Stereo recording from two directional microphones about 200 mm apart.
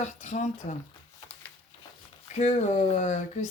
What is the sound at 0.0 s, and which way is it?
Speech, 35° left (ahead or behind).